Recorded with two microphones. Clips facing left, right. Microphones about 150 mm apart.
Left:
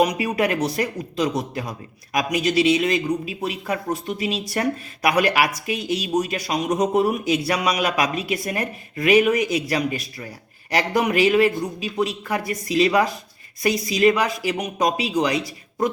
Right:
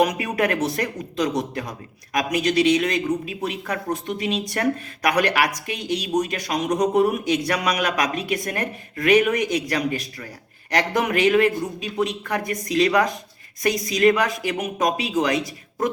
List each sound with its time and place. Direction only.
0.0 s a man's voice: centre (ahead or behind)
12.4 s speech: 45° right (ahead or behind)
12.7 s a man's voice: 5° left (ahead or behind)